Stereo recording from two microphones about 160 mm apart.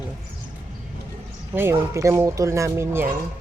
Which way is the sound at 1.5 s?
15° right (ahead or behind).